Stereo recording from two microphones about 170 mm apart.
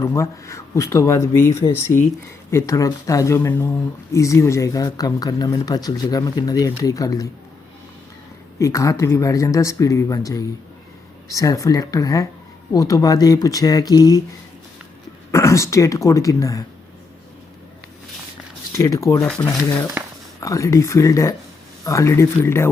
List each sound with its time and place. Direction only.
0.0 s speech: 15° left (ahead or behind)
8.5 s speech: 20° left (ahead or behind)
15.3 s speech: 15° left (ahead or behind)
18.7 s speech: 20° left (ahead or behind)
19.2 s speech: 5° left (ahead or behind)
20.0 s a sound: 10° right (ahead or behind)
20.4 s speech: 20° left (ahead or behind)